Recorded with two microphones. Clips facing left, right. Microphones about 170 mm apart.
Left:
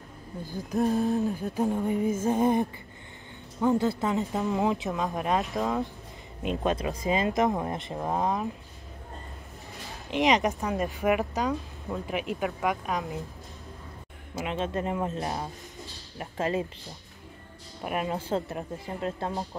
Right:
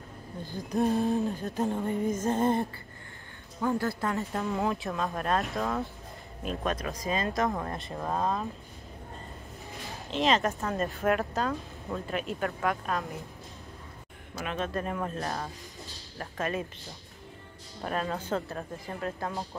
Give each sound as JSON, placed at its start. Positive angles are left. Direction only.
{"t": 0.5, "sound": "speech", "side_deg": 0}
{"t": 10.1, "sound": "speech", "side_deg": 15}
{"t": 14.3, "sound": "speech", "side_deg": 25}
{"t": 17.8, "sound": "speech", "side_deg": 15}
{"t": 18.1, "sound": "speech", "side_deg": 25}